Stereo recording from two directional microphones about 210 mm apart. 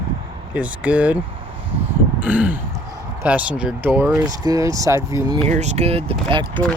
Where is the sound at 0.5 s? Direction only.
5° right (ahead or behind).